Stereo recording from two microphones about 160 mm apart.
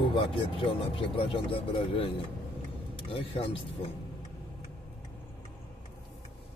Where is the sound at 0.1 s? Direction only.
30° left (ahead or behind).